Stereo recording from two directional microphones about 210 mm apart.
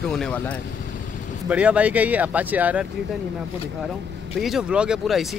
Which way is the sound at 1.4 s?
5° right (ahead or behind).